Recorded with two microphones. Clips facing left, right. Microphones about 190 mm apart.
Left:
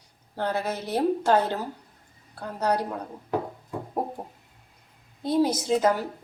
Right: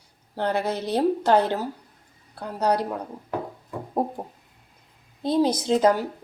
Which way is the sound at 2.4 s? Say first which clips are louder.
Right 2 dB; 15° right (ahead or behind).